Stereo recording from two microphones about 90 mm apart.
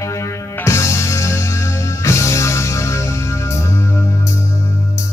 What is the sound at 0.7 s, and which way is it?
Music, 35° left (ahead or behind).